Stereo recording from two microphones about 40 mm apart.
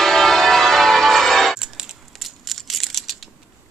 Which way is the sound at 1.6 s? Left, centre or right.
Centre.